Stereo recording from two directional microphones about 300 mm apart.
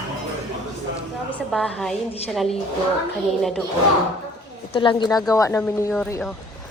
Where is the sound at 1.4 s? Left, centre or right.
Centre.